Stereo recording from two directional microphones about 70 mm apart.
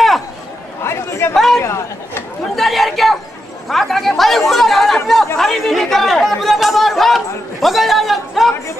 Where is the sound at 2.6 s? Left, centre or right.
Centre.